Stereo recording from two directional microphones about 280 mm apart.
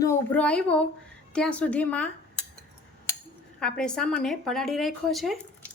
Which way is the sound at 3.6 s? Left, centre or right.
Centre.